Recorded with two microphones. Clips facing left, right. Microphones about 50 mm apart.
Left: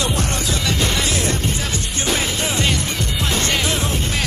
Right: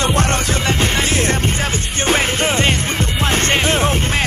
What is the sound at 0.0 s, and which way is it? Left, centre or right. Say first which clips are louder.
Music: right 5 dB; right.